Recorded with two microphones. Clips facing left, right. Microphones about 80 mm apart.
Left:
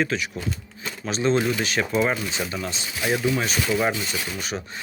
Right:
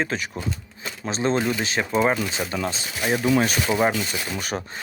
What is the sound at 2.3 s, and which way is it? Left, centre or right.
Speech, right.